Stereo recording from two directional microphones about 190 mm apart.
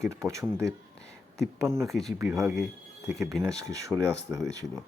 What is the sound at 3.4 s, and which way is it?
Speech, 15° right (ahead or behind).